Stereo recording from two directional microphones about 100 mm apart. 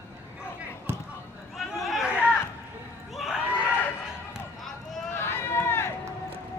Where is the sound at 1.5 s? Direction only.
Centre (ahead or behind).